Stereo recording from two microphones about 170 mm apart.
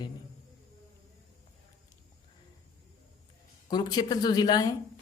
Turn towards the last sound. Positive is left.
turn(degrees=25)  # may be behind; listen again after turning